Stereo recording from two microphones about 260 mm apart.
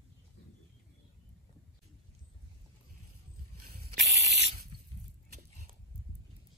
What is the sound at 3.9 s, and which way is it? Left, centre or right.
Spray, right.